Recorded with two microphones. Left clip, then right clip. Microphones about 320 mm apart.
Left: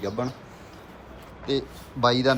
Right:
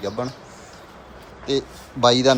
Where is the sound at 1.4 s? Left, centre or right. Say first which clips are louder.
Right 4 dB; centre.